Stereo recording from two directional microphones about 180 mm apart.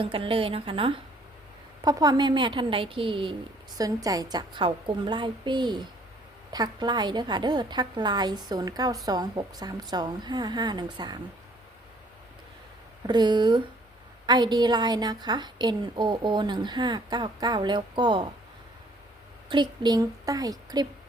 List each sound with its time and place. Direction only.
0.0 s a woman's voice: 30° right (ahead or behind)
13.1 s a woman's voice: 25° right (ahead or behind)
19.5 s a woman's voice: 25° right (ahead or behind)